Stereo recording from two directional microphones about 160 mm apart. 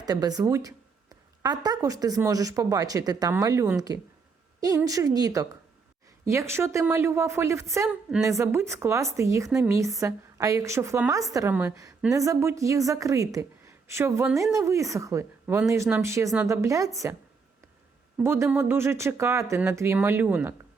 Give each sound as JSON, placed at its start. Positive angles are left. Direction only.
{"t": 0.0, "sound": "a woman's voice", "side_deg": -25}
{"t": 18.2, "sound": "speech", "side_deg": -15}